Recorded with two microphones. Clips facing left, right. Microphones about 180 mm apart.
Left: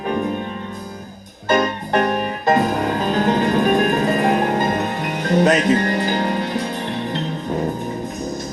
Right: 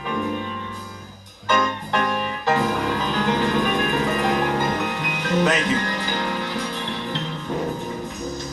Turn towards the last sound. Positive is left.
turn(degrees=50)  # may be behind; listen again after turning